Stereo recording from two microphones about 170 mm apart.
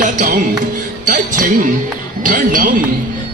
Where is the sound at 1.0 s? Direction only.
50° right (ahead or behind).